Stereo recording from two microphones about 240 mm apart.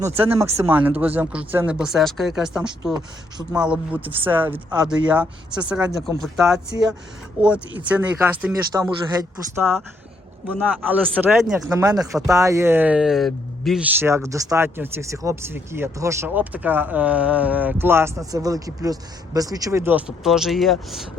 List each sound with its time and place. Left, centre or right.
0.0 s speech: centre
2.6 s speech: centre
3.5 s speech: centre
11.7 s speech: centre